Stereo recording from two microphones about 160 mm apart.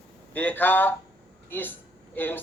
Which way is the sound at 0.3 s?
10° left (ahead or behind).